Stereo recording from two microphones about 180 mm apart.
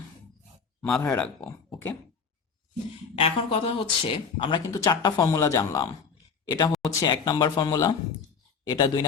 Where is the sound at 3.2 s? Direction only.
30° left (ahead or behind).